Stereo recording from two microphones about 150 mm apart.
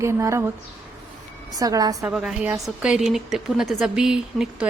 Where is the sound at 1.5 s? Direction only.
25° right (ahead or behind).